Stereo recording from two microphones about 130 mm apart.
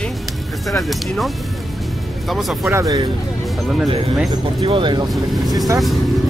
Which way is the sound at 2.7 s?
25° right (ahead or behind).